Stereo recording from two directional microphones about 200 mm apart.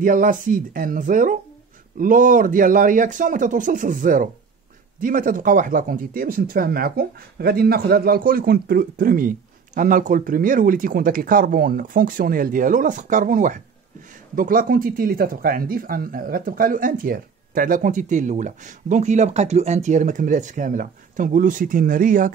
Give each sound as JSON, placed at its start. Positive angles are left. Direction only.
{"t": 0.0, "sound": "a man's voice", "side_deg": -45}